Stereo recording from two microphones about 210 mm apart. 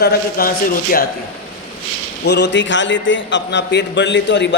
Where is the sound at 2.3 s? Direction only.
55° left (ahead or behind).